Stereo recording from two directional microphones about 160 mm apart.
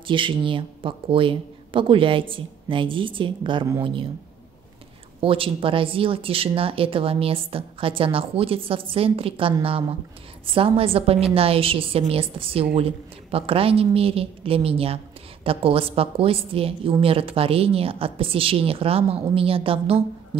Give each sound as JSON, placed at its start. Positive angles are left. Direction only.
{"t": 0.0, "sound": "speech", "side_deg": -30}
{"t": 5.2, "sound": "speech", "side_deg": -35}